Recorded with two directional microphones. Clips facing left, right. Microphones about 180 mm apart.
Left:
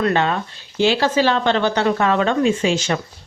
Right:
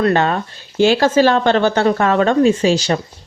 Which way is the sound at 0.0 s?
45° right (ahead or behind).